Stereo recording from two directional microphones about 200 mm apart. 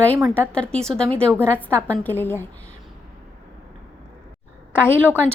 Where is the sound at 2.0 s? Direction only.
10° left (ahead or behind).